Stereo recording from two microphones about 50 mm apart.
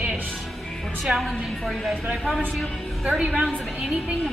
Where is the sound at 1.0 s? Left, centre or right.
Centre.